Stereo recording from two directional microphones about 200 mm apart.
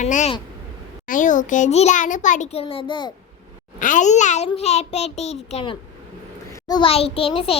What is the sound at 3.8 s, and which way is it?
Child singing, 40° left (ahead or behind).